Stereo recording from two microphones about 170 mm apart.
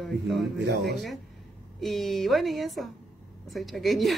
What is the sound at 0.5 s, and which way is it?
Speech, 80° right.